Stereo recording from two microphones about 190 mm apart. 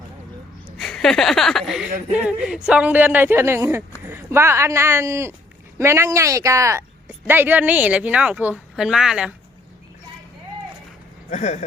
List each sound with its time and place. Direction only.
0.8 s speech: centre (ahead or behind)
11.3 s speech: 35° left (ahead or behind)